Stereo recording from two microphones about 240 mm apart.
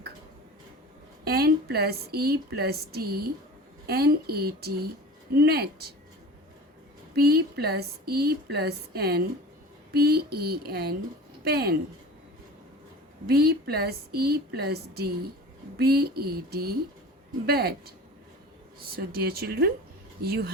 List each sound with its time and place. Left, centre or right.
1.2 s a woman's voice: right
7.2 s a woman's voice: right
13.2 s a woman's voice: right